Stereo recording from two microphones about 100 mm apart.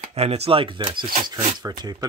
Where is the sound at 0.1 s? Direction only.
90° right; by 0.7 s 65° right (ahead or behind).